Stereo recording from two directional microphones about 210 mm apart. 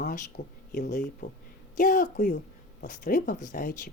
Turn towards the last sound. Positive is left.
turn(degrees=40)  # may be behind; listen again after turning